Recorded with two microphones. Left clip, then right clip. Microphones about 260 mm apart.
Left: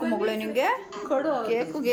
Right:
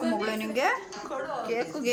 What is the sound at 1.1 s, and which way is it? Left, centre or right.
Speech, left.